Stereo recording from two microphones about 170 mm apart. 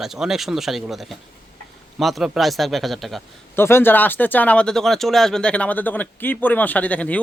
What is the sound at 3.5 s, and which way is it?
A man's voice, 15° left (ahead or behind).